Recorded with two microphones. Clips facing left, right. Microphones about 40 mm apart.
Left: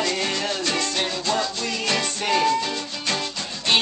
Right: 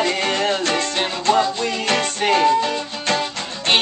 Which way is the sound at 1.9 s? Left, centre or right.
Right.